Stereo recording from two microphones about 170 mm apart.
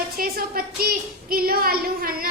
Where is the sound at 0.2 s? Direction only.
60° right (ahead or behind).